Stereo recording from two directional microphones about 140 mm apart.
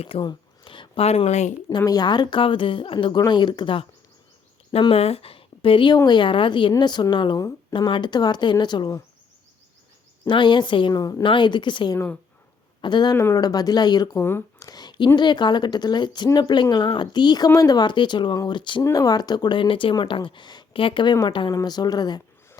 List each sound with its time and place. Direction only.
0.0 s speech: 45° left (ahead or behind)
1.7 s speech: 30° left (ahead or behind)
10.2 s speech: 35° left (ahead or behind)
14.2 s speech: 15° left (ahead or behind)
14.7 s speech: 30° left (ahead or behind)